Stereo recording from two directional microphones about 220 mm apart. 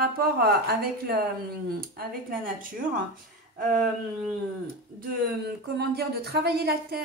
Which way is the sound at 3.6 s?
40° right (ahead or behind).